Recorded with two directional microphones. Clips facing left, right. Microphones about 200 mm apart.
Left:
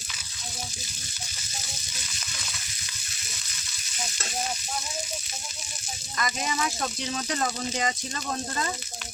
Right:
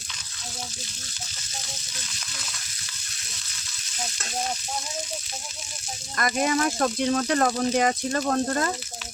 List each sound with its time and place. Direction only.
6.1 s speech: 55° right (ahead or behind)